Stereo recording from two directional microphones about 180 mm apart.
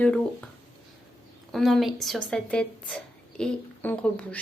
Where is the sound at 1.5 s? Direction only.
Centre (ahead or behind).